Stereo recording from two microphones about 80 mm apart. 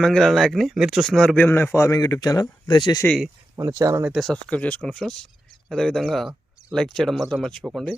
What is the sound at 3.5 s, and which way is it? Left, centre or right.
Speech, right.